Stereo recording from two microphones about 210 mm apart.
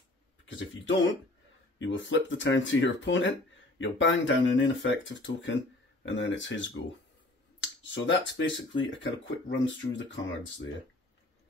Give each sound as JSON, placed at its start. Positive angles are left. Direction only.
{"t": 0.5, "sound": "speech", "side_deg": 60}
{"t": 7.8, "sound": "speech", "side_deg": 60}